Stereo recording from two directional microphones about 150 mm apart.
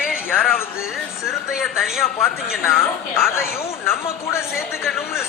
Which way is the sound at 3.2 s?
15° left (ahead or behind).